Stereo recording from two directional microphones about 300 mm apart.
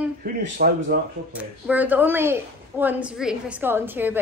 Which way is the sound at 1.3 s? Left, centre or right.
Centre.